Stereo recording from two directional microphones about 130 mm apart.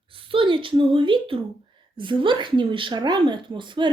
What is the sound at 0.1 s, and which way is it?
A woman's voice, 45° right (ahead or behind).